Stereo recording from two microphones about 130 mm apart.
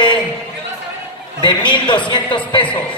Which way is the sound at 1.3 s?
35° left (ahead or behind).